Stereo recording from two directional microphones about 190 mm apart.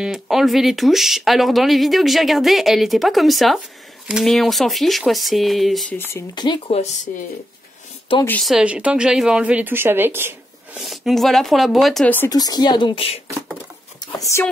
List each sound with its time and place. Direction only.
0.0 s speech: centre (ahead or behind)
6.1 s speech: 20° left (ahead or behind)
8.3 s speech: centre (ahead or behind)
10.8 s speech: centre (ahead or behind)
12.3 s speech: 20° left (ahead or behind)
14.2 s speech: 15° left (ahead or behind)